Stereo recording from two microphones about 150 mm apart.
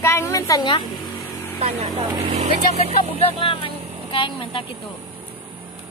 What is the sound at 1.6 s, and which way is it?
Speech, 40° right (ahead or behind).